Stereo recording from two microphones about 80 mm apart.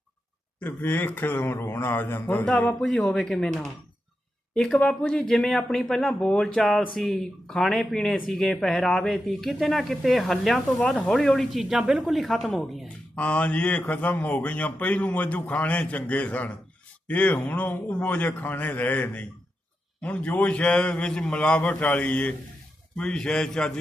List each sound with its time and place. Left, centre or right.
0.6 s a man's voice: left
2.8 s speech: centre
13.1 s a man's voice: centre